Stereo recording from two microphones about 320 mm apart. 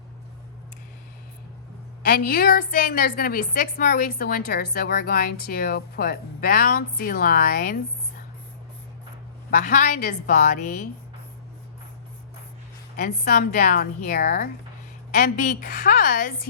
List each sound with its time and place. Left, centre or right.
2.0 s a woman's voice: left
9.6 s a woman's voice: left
13.0 s a woman's voice: left